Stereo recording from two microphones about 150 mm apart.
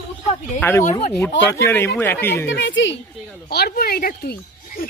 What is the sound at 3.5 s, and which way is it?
Speech, 90° left.